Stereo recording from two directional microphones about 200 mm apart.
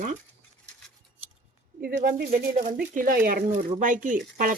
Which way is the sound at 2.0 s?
55° right (ahead or behind).